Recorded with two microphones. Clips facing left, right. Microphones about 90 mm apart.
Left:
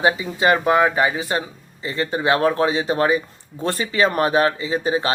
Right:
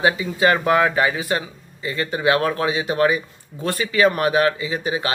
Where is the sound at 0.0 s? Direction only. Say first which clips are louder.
Even; 25° left (ahead or behind).